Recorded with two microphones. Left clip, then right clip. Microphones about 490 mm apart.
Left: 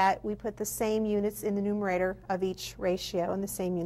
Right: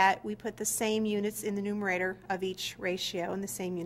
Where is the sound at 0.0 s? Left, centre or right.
Left.